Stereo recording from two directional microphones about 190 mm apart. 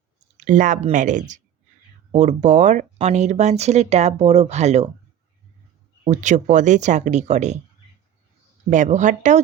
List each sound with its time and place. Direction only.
0.3 s speech: 40° right (ahead or behind)
6.1 s speech: 40° right (ahead or behind)
8.7 s speech: 40° right (ahead or behind)